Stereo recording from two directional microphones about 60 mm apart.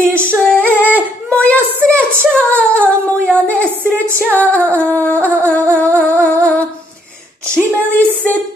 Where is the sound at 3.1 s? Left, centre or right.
Left.